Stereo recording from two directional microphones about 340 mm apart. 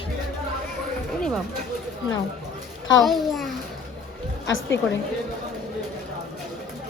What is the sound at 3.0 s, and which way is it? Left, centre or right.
Speech, centre.